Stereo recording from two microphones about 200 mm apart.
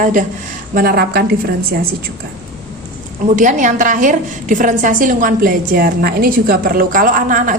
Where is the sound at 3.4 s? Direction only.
40° right (ahead or behind).